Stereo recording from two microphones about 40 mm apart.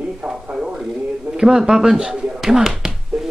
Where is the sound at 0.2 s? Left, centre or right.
Right.